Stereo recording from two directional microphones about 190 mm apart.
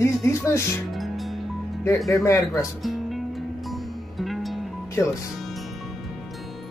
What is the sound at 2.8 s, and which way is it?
Music, centre (ahead or behind).